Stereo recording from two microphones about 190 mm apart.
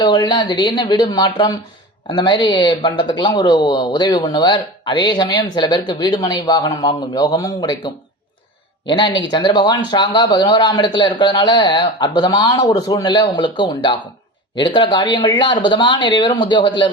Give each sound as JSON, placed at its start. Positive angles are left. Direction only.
{"t": 0.0, "sound": "speech", "side_deg": 25}